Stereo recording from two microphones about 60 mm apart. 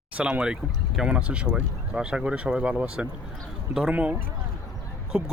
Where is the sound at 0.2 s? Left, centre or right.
Centre.